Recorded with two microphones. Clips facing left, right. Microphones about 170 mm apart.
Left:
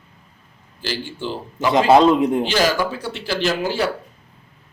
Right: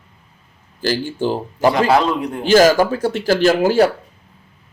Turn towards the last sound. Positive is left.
turn(degrees=-45)  # may be behind; listen again after turning